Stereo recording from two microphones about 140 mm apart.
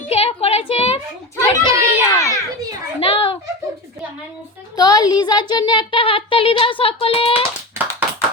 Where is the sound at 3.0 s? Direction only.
40° left (ahead or behind).